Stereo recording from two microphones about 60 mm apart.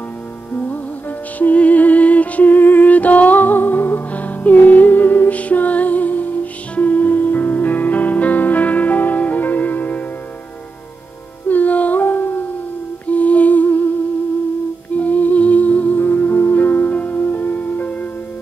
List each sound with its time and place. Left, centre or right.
0.5 s music: left
11.4 s music: left
13.0 s humming: left
15.0 s music: left